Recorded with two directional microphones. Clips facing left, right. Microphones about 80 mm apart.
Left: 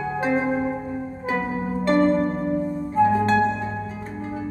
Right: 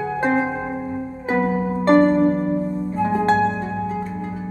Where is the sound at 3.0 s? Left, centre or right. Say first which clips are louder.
Right 2 dB; right.